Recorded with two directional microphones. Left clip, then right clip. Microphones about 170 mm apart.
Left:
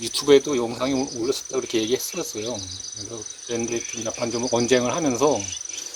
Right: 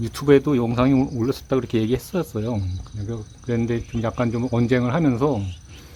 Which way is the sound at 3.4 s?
15° left (ahead or behind).